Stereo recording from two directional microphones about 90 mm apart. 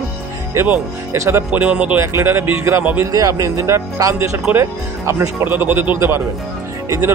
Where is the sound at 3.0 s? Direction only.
35° right (ahead or behind); by 5.9 s 20° right (ahead or behind).